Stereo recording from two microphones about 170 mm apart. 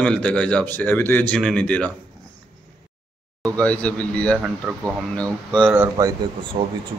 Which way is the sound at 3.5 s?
10° left (ahead or behind).